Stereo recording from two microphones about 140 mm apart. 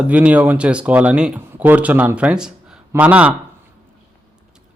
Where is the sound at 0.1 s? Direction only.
10° right (ahead or behind).